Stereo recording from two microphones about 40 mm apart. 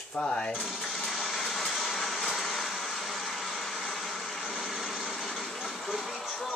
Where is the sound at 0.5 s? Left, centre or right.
Centre.